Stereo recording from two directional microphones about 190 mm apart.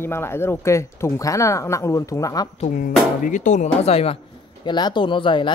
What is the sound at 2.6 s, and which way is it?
Speech, 45° left (ahead or behind).